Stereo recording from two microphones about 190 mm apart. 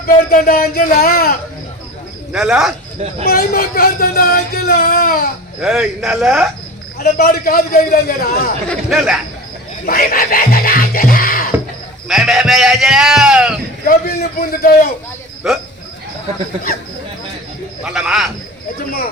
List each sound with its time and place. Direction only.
0.3 s speech: 50° left (ahead or behind)
2.3 s a man's voice: 5° right (ahead or behind)
3.2 s speech: 50° left (ahead or behind)
5.6 s a man's voice: 5° right (ahead or behind)
7.0 s speech: 50° left (ahead or behind)
8.7 s a man's voice: centre (ahead or behind)
9.8 s music: 50° left (ahead or behind)
12.0 s a man's voice: centre (ahead or behind)
13.8 s speech: 50° left (ahead or behind)
15.4 s a man's voice: centre (ahead or behind)
17.8 s a man's voice: 5° right (ahead or behind)